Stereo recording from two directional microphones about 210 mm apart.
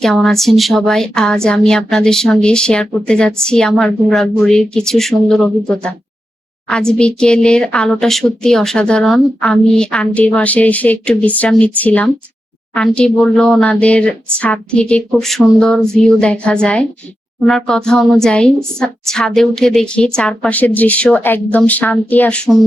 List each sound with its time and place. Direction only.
0.0 s speech: centre (ahead or behind)